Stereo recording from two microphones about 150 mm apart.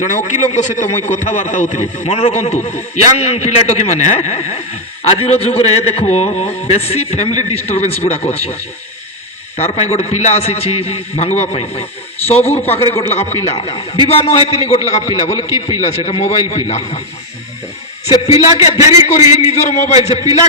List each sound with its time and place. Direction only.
0.0 s a man's voice: 50° left (ahead or behind)
9.6 s a man's voice: 45° left (ahead or behind)
13.6 s a man's voice: 30° left (ahead or behind)
14.1 s a man's voice: 45° left (ahead or behind)
18.8 s a man's voice: 20° right (ahead or behind)
19.4 s a man's voice: 45° left (ahead or behind)